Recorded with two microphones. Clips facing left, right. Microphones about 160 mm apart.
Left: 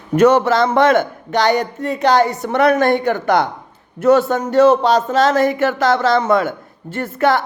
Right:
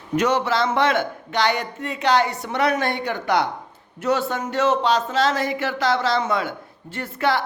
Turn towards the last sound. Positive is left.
turn(degrees=50)  # may be behind; listen again after turning